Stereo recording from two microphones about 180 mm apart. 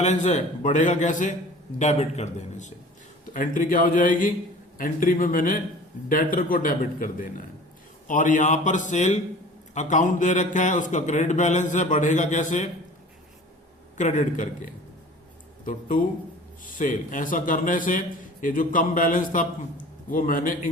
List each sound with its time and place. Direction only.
0.0 s a man's voice: 40° left (ahead or behind)
13.9 s a man's voice: 40° left (ahead or behind)
15.9 s a man's voice: 50° left (ahead or behind)